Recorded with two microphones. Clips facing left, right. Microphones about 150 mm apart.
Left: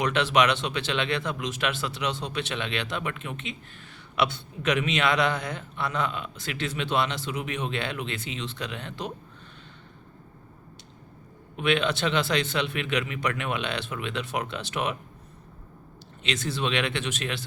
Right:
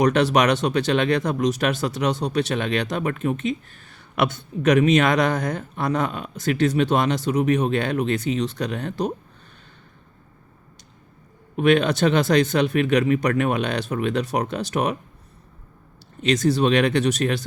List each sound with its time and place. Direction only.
0.0 s speech: 40° right (ahead or behind)
11.5 s speech: 45° right (ahead or behind)
16.2 s speech: 40° right (ahead or behind)